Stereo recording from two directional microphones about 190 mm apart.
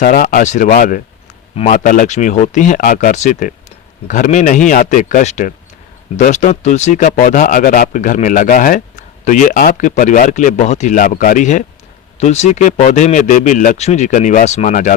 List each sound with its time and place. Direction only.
0.0 s speech: 45° left (ahead or behind)